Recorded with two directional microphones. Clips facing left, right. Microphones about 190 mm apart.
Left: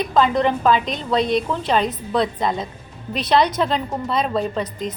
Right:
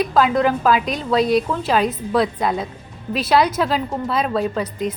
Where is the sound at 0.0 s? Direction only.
5° right (ahead or behind).